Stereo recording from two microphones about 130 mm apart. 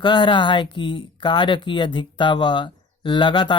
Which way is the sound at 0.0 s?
35° left (ahead or behind).